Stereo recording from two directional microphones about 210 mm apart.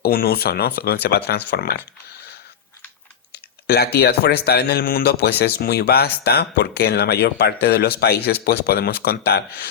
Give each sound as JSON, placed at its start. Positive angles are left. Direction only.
{"t": 0.0, "sound": "speech", "side_deg": 45}
{"t": 3.3, "sound": "speech", "side_deg": 50}